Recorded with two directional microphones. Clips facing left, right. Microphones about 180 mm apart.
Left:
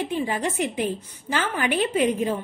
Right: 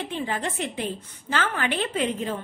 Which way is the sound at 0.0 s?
10° left (ahead or behind).